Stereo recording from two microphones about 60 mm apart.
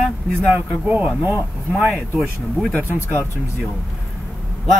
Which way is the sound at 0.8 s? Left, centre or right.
Right.